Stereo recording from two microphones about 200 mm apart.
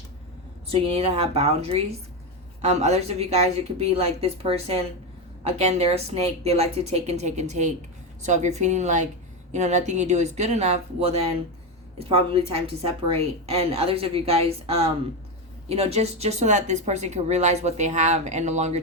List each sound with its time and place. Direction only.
0.7 s a woman's voice: 30° right (ahead or behind)